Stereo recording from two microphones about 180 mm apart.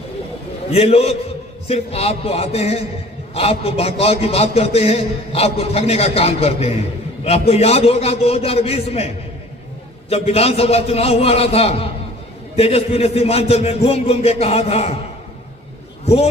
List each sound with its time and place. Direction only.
0.7 s a man's voice: 35° left (ahead or behind)
16.0 s a man's voice: 35° left (ahead or behind)